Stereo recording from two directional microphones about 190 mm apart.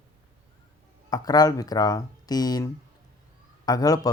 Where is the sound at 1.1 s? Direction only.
20° left (ahead or behind).